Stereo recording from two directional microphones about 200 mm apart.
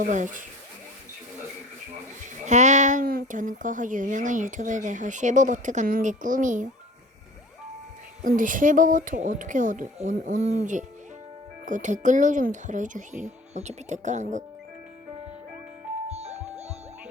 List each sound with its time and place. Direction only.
0.0 s speech: 40° right (ahead or behind)
2.2 s speech: 35° right (ahead or behind)
8.2 s speech: 40° right (ahead or behind)
16.0 s music: 35° right (ahead or behind)